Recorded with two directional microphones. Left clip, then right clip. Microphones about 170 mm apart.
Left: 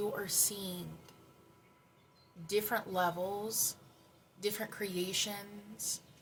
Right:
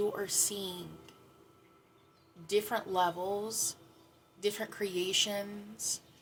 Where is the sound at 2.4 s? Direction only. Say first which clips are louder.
Right 2 dB; 15° right (ahead or behind).